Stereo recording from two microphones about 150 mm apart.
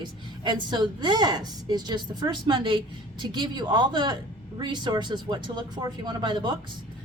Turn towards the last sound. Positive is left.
turn(degrees=-30)  # may be behind; listen again after turning